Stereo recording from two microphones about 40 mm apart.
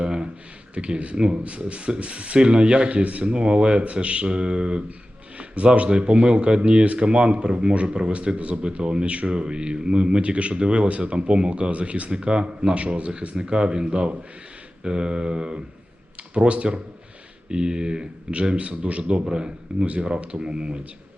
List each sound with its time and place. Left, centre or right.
0.0 s a sound: right
0.7 s speech: right
3.2 s speech: right